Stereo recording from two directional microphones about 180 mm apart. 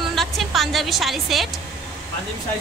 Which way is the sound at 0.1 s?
Centre (ahead or behind).